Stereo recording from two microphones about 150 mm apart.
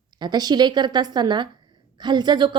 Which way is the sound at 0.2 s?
25° right (ahead or behind).